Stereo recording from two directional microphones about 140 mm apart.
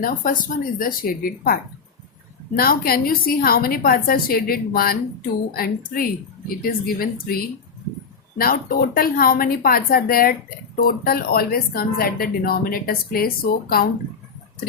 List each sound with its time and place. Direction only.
0.0 s speech: 70° left (ahead or behind); by 1.5 s 90° left
2.6 s speech: 90° left